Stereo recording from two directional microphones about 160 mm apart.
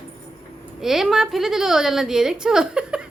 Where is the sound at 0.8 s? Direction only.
Centre (ahead or behind).